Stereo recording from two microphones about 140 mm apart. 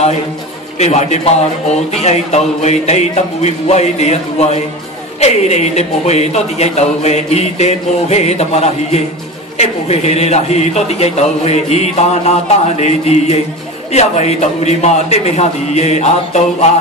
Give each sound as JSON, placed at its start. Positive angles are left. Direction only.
{"t": 0.7, "sound": "speech", "side_deg": 55}